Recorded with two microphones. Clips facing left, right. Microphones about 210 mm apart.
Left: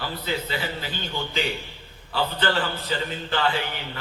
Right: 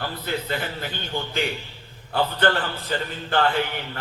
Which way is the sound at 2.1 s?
55° right (ahead or behind).